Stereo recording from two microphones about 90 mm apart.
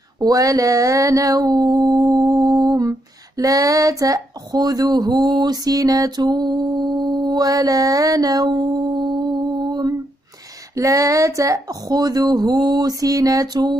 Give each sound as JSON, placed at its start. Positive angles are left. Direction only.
{"t": 0.2, "sound": "mantra", "side_deg": -40}
{"t": 10.7, "sound": "speech", "side_deg": -40}